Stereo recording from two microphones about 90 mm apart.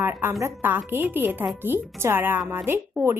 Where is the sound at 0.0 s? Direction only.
25° right (ahead or behind).